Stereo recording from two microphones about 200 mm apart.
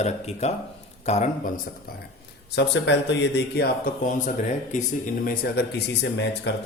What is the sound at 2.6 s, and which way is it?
A man's voice, 60° left (ahead or behind).